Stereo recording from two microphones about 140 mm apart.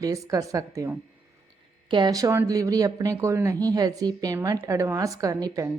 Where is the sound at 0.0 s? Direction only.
25° right (ahead or behind).